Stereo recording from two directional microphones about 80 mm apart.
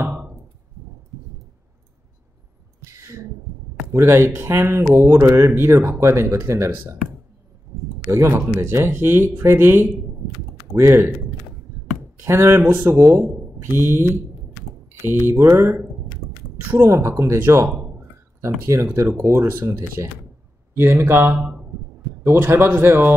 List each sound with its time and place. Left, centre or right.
3.9 s speech: right
8.1 s a man's voice: right
12.2 s a man's voice: right
16.8 s speech: right
20.7 s a man's voice: right